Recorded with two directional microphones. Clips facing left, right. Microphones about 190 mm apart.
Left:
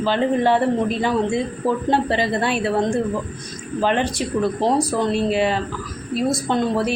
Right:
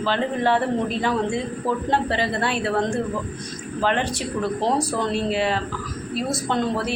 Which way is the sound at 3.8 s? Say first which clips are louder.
Left 3 dB; 15° left (ahead or behind).